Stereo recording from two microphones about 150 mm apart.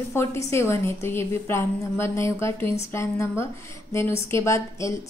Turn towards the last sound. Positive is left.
turn(degrees=20)  # may be behind; listen again after turning